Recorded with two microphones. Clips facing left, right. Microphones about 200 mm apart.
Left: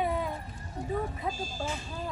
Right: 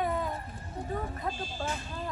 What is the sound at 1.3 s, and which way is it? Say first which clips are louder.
Speech: left 1 dB; 45° left (ahead or behind).